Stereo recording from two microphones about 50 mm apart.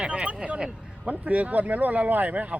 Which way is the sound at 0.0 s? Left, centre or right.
Right.